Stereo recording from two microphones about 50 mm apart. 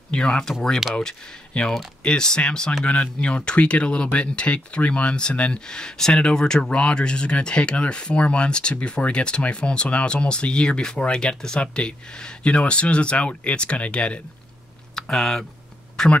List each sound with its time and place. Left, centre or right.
0.1 s speech: centre
15.0 s speech: centre